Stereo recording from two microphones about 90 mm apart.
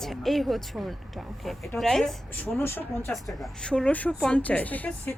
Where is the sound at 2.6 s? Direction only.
25° left (ahead or behind).